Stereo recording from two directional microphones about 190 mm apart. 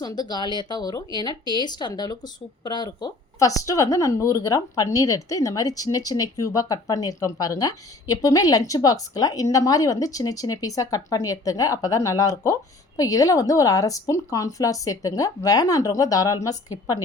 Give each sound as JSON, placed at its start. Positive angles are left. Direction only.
{"t": 0.0, "sound": "a woman's voice", "side_deg": 20}